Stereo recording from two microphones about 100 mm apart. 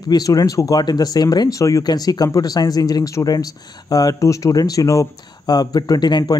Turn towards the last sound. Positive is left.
turn(degrees=45)  # may be behind; listen again after turning